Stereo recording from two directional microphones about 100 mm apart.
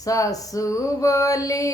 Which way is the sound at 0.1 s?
35° left (ahead or behind).